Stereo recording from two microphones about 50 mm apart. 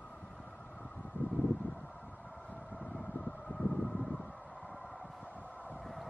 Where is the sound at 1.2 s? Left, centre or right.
Left.